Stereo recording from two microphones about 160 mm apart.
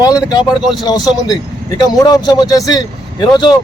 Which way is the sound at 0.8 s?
25° left (ahead or behind).